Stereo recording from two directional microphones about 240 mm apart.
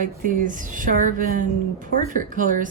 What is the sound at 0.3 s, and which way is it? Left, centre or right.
Speech, right.